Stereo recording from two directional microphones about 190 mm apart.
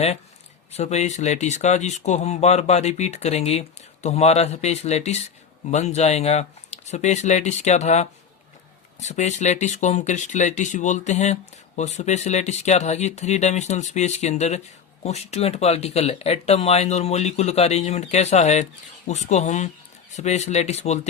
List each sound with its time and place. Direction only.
0.7 s speech: 35° left (ahead or behind)